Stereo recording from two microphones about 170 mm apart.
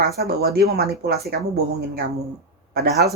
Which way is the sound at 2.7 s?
65° right (ahead or behind).